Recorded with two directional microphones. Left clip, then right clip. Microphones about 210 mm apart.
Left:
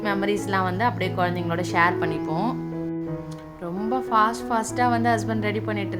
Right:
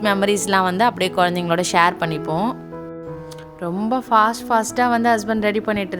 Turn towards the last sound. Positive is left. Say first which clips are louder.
# right 6 dB
turn(degrees=-40)  # may be behind; listen again after turning